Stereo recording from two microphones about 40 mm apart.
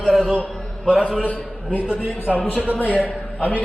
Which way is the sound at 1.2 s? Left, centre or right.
Left.